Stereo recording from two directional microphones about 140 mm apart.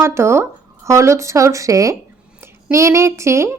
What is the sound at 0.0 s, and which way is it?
A woman's voice, 20° right (ahead or behind).